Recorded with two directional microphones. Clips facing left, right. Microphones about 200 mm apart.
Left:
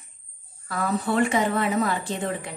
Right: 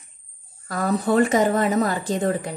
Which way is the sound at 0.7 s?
40° right (ahead or behind).